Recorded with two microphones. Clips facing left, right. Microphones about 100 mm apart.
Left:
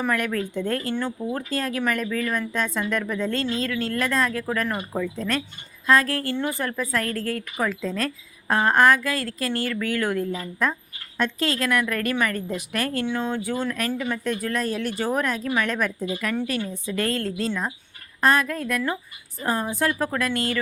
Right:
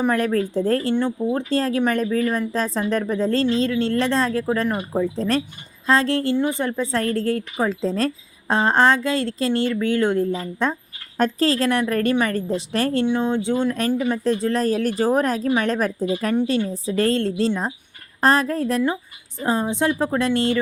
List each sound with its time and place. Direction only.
0.0 s speech: 30° right (ahead or behind)
13.1 s speech: 20° right (ahead or behind)
14.6 s speech: 40° right (ahead or behind)
16.3 s speech: 20° right (ahead or behind)
16.6 s speech: 35° right (ahead or behind)